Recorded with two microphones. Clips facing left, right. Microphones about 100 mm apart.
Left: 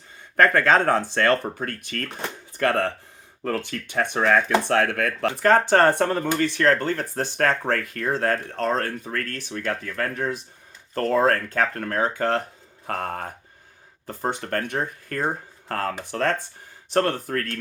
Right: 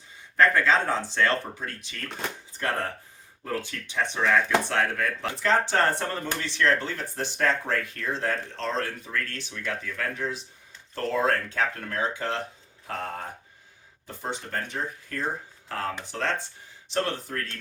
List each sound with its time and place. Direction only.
0.3 s speech: 55° left (ahead or behind)
2.0 s speech: 5° left (ahead or behind)
2.5 s speech: 70° left (ahead or behind)